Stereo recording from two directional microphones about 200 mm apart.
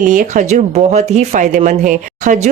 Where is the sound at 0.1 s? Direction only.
40° right (ahead or behind).